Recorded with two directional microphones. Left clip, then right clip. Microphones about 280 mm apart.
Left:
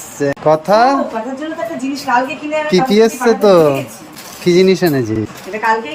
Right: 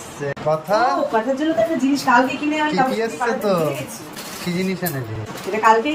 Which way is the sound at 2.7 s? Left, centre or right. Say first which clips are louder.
Left 8 dB; left.